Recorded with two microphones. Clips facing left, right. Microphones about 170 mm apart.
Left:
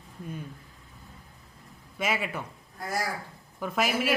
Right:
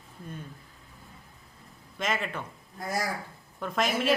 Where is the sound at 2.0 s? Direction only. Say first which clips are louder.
Left 1 dB; 10° left (ahead or behind).